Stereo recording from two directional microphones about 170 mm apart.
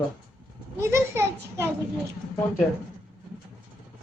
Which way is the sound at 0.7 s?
15° right (ahead or behind).